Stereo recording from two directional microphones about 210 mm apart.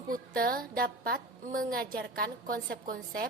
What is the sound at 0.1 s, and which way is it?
A woman's voice, 45° right (ahead or behind).